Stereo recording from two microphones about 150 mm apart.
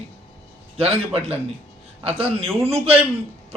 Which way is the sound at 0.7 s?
40° right (ahead or behind).